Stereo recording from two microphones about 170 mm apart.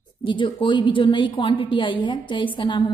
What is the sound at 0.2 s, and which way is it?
A woman's voice, 30° left (ahead or behind).